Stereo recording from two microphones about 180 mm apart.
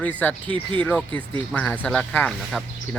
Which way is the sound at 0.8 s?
10° left (ahead or behind).